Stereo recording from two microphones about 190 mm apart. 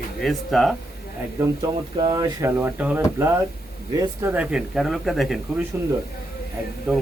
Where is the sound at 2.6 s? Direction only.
10° right (ahead or behind).